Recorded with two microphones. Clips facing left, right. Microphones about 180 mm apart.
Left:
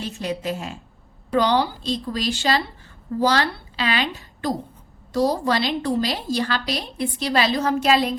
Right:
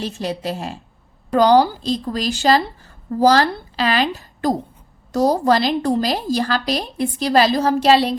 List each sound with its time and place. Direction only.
0.0 s a woman's voice: 35° right (ahead or behind)